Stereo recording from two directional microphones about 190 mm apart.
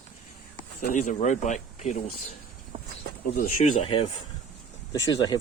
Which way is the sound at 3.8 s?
30° left (ahead or behind).